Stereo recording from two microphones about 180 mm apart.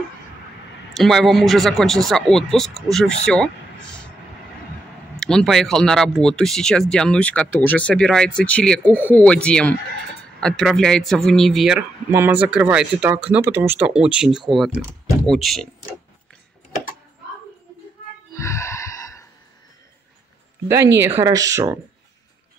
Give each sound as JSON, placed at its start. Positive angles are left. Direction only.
{"t": 0.9, "sound": "speech", "side_deg": 0}
{"t": 5.2, "sound": "speech", "side_deg": 5}
{"t": 18.3, "sound": "gasp", "side_deg": 15}
{"t": 20.6, "sound": "speech", "side_deg": -15}